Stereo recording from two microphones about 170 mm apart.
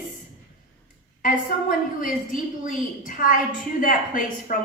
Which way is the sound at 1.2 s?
50° left (ahead or behind).